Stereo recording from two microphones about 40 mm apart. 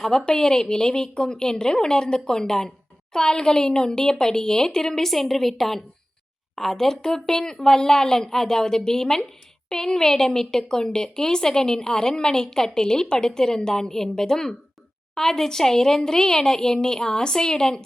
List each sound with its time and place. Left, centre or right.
0.0 s a woman's voice: centre